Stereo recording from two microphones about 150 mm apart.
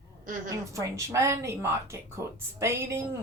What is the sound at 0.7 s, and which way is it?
A woman's voice, 20° right (ahead or behind).